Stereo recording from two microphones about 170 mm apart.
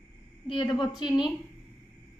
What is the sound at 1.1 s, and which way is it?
Speech, 5° right (ahead or behind).